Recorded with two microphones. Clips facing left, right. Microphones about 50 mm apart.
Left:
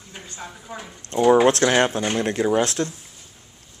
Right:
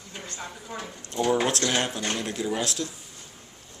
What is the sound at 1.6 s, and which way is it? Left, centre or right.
Speech, left.